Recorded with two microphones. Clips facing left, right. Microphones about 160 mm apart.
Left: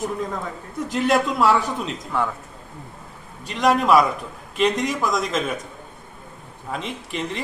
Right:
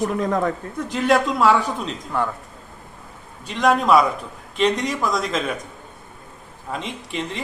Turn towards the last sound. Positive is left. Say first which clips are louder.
# even
turn(degrees=0)  # may be behind; listen again after turning